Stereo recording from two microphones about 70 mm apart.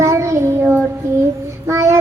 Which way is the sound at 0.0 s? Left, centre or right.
Right.